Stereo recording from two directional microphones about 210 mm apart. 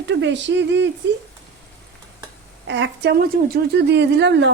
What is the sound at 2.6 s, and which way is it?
Speech, 55° right (ahead or behind).